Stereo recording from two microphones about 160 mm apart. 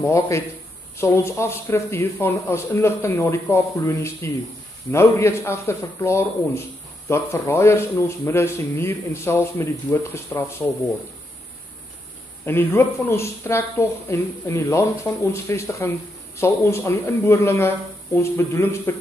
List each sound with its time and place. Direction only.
0.0 s speech: 20° left (ahead or behind)
12.4 s speech: 15° left (ahead or behind)